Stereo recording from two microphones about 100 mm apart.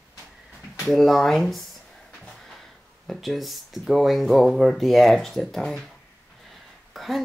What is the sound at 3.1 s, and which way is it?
Speech, centre (ahead or behind).